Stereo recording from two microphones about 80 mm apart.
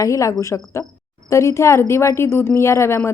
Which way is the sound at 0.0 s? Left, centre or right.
Left.